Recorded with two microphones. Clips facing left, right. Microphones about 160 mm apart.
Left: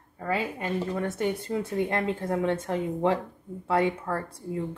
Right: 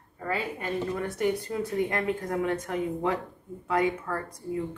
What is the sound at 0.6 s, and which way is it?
A woman's voice, 25° left (ahead or behind).